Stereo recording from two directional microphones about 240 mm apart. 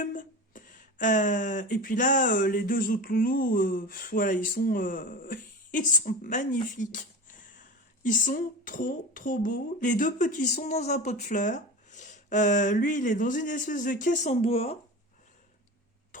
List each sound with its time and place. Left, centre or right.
0.0 s speech: left
8.0 s speech: left